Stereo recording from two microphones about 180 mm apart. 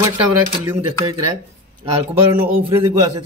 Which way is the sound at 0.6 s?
20° right (ahead or behind).